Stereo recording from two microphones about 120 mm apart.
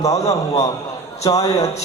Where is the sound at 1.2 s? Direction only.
30° left (ahead or behind).